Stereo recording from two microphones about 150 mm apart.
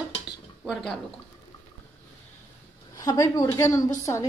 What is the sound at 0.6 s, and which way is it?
Speech, centre (ahead or behind).